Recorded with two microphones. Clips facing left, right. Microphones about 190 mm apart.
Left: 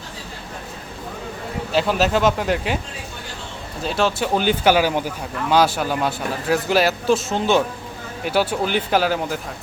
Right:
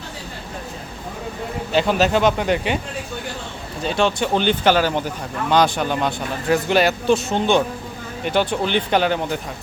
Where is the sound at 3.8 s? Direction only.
Centre (ahead or behind).